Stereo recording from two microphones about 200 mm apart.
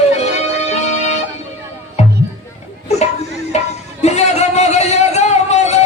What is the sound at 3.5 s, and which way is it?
Music, 35° left (ahead or behind).